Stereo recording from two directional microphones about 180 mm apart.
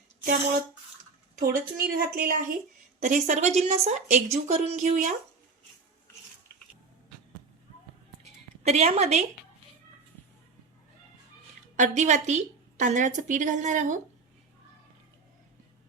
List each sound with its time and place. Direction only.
1.4 s a woman's voice: 50° right (ahead or behind)
8.2 s music: 35° right (ahead or behind)
11.8 s a woman's voice: 40° right (ahead or behind)